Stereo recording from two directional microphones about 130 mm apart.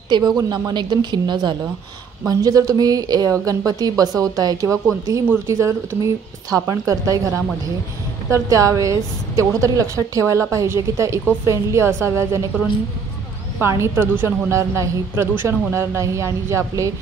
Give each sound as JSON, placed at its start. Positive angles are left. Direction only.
{"t": 0.4, "sound": "a woman's voice", "side_deg": -30}
{"t": 13.6, "sound": "a woman's voice", "side_deg": -20}